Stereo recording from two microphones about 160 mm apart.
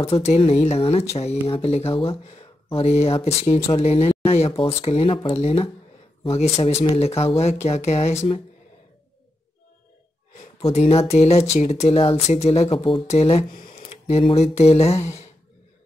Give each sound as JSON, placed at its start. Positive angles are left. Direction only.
{"t": 0.1, "sound": "speech", "side_deg": 40}
{"t": 10.3, "sound": "speech", "side_deg": 45}
{"t": 13.5, "sound": "a sound", "side_deg": 60}
{"t": 13.7, "sound": "speech", "side_deg": 40}